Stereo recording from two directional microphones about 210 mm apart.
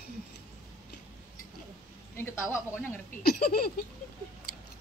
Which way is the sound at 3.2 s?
45° left (ahead or behind).